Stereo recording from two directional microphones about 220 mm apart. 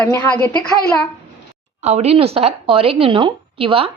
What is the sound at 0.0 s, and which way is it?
Speech, 10° left (ahead or behind).